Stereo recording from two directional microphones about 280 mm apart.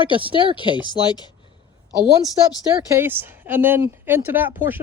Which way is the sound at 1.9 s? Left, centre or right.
Centre.